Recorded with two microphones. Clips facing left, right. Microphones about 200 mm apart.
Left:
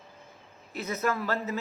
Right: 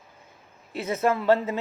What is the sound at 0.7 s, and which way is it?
Speech, 30° right (ahead or behind).